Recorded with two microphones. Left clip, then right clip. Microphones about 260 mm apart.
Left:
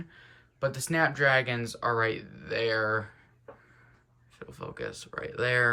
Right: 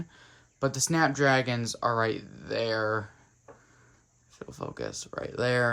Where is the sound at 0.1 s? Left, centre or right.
Right.